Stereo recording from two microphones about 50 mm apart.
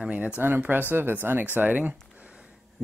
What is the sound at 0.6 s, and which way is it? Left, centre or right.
Speech, right.